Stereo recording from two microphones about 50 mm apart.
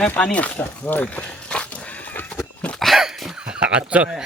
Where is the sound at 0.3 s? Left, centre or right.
Left.